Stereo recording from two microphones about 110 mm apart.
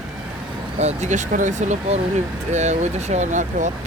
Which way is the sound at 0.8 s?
90° right.